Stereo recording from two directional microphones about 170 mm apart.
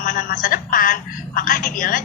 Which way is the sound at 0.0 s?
50° left (ahead or behind).